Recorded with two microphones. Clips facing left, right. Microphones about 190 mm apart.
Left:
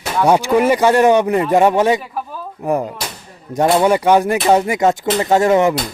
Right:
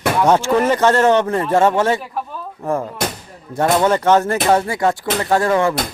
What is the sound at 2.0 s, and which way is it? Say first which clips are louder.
Speech: even; centre (ahead or behind).